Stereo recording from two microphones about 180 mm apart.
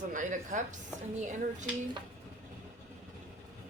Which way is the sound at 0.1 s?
45° right (ahead or behind).